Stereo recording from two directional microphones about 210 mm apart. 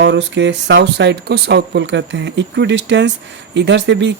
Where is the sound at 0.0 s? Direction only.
60° right (ahead or behind).